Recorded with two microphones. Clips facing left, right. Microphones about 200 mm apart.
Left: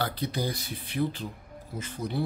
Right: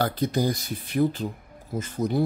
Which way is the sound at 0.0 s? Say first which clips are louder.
Right 6 dB; 45° right (ahead or behind).